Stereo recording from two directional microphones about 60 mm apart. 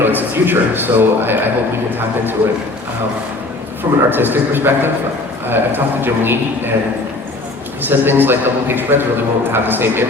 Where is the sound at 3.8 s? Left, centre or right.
Right.